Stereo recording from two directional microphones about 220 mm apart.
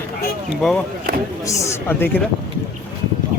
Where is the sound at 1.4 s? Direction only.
15° left (ahead or behind).